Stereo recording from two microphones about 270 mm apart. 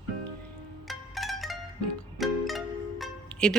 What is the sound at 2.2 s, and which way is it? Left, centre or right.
Music, centre.